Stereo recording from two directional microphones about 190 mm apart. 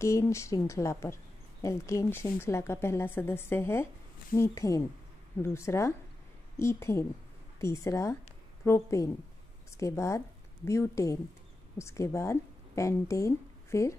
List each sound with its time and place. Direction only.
0.0 s a woman's voice: 15° left (ahead or behind)